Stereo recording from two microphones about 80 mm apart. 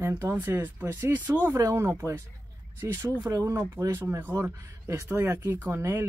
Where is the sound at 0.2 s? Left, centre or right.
Right.